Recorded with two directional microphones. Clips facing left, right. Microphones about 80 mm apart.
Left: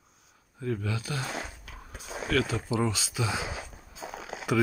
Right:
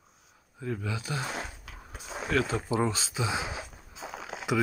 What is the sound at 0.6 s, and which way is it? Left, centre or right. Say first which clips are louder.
Speech: left 2 dB; centre.